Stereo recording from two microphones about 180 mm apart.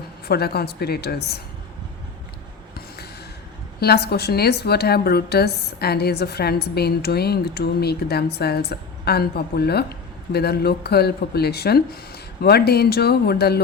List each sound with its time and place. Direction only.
0.3 s a woman's voice: 60° left (ahead or behind)
2.7 s a sound: 60° left (ahead or behind)
3.8 s a woman's voice: 60° left (ahead or behind)